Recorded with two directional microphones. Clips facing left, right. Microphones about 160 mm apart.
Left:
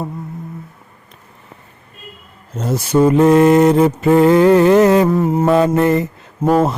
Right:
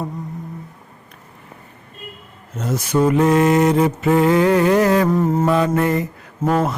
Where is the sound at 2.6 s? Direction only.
30° left (ahead or behind).